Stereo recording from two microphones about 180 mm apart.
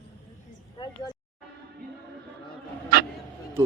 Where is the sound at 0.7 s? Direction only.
25° left (ahead or behind).